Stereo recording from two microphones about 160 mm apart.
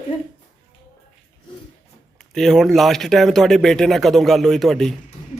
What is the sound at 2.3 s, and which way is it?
Speech, centre (ahead or behind).